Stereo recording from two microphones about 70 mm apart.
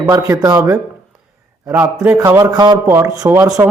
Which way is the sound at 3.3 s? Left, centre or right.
Right.